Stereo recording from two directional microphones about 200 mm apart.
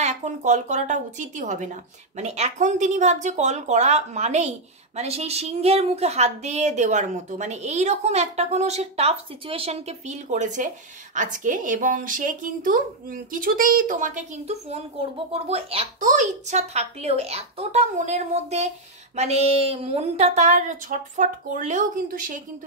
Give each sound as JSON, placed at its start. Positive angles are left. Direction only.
{"t": 0.0, "sound": "speech", "side_deg": -35}